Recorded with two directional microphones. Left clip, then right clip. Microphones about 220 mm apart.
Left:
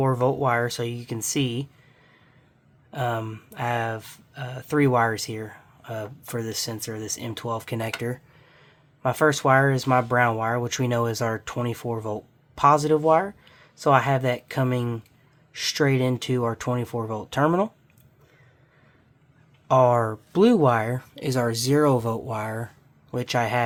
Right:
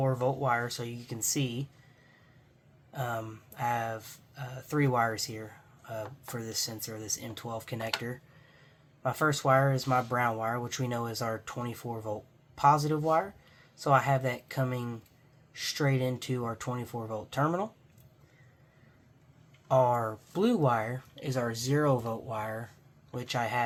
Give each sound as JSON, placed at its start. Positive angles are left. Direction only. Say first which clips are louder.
{"t": 0.0, "sound": "speech", "louder": "left 7 dB", "side_deg": 60}
{"t": 2.9, "sound": "speech", "louder": "left 8 dB", "side_deg": 50}
{"t": 19.6, "sound": "a man's voice", "louder": "left 7 dB", "side_deg": 55}